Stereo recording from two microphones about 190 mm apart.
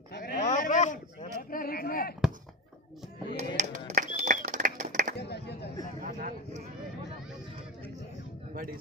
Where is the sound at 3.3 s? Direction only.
40° right (ahead or behind).